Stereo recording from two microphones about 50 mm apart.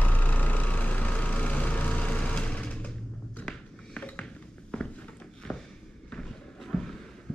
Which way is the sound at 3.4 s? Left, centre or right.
Centre.